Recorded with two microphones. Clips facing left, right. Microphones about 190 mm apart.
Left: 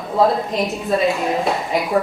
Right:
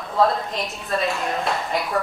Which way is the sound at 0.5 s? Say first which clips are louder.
Left 7 dB; centre (ahead or behind).